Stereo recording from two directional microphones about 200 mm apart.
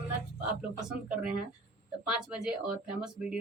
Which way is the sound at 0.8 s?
5° right (ahead or behind).